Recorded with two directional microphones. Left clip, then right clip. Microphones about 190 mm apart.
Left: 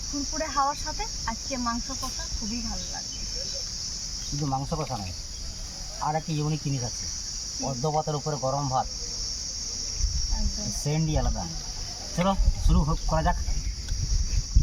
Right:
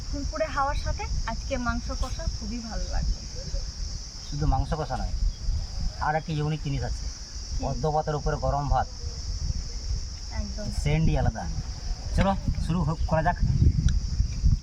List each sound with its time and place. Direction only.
0.3 s speech: 20° right (ahead or behind)
4.4 s cricket: 5° right (ahead or behind)
6.1 s cricket: centre (ahead or behind)
10.8 s cricket: centre (ahead or behind)